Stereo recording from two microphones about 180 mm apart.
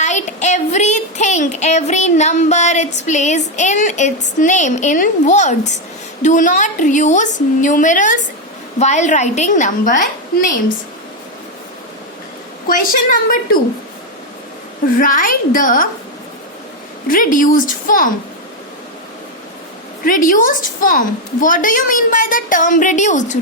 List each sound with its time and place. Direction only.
0.0 s child singing: 40° left (ahead or behind)
4.4 s a woman's voice: 40° left (ahead or behind)
12.6 s a woman's voice: 50° left (ahead or behind)
14.9 s a woman's voice: 50° left (ahead or behind)
17.1 s a woman's voice: 50° left (ahead or behind)
20.1 s a woman's voice: 45° left (ahead or behind)